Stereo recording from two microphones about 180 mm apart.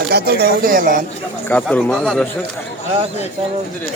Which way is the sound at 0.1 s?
60° right (ahead or behind).